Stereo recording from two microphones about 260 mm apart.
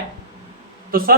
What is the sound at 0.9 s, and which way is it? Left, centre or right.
Speech, right.